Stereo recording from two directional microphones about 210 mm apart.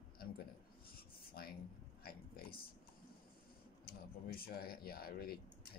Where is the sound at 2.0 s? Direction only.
45° left (ahead or behind).